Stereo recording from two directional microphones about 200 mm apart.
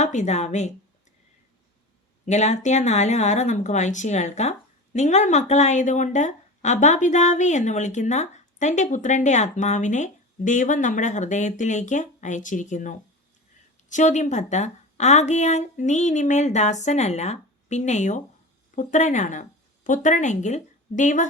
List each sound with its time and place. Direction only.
0.0 s a woman's voice: 35° left (ahead or behind)
2.2 s a woman's voice: 35° left (ahead or behind)